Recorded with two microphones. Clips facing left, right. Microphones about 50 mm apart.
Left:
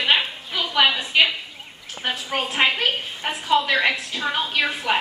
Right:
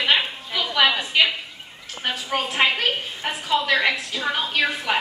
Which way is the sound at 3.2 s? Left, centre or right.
Centre.